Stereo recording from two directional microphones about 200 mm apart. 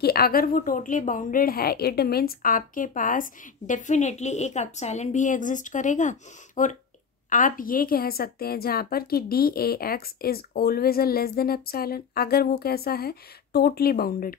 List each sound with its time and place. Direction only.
0.0 s a woman's voice: 50° left (ahead or behind)